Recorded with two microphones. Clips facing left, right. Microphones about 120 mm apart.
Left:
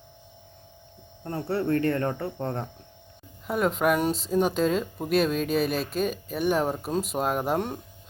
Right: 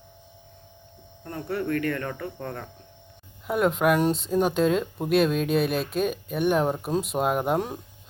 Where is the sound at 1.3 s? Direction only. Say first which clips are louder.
Left 2 dB; 30° left (ahead or behind).